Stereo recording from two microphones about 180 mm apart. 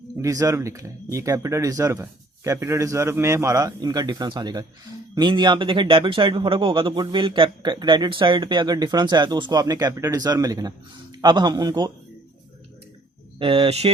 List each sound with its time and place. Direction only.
0.2 s speech: 20° right (ahead or behind)
13.4 s speech: 30° right (ahead or behind)